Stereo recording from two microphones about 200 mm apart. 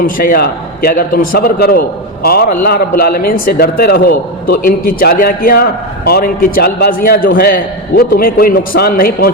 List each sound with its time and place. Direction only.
0.0 s a man's voice: 45° left (ahead or behind)